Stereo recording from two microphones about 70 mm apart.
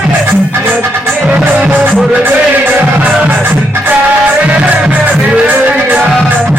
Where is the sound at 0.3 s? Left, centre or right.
Right.